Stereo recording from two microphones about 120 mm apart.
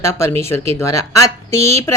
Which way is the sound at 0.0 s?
25° left (ahead or behind).